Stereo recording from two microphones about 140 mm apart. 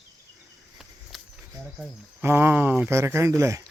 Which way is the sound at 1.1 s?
Centre (ahead or behind).